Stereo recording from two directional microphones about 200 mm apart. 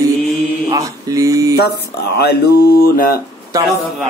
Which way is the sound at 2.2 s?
55° left (ahead or behind).